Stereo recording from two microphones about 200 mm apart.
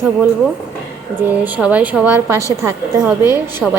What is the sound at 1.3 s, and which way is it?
A woman's voice, 10° right (ahead or behind).